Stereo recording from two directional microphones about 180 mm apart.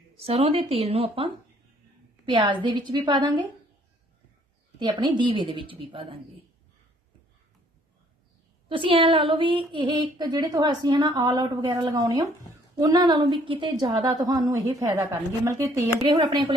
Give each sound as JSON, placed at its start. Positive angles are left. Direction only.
{"t": 0.2, "sound": "a woman's voice", "side_deg": -35}
{"t": 4.8, "sound": "a woman's voice", "side_deg": -25}
{"t": 8.7, "sound": "a woman's voice", "side_deg": -30}